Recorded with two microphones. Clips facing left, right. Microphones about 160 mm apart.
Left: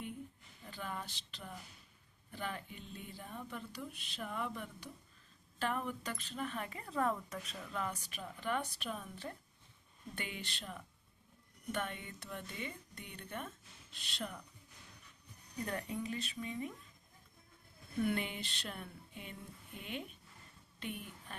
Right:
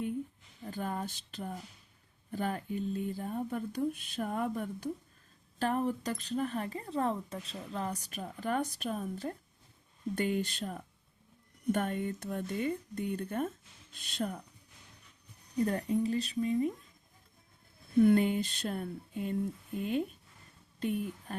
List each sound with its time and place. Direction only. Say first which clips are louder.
0.7 s speech: right 8 dB; 45° right (ahead or behind)
15.6 s speech: right 10 dB; 35° right (ahead or behind)
18.0 s speech: right 11 dB; 40° right (ahead or behind)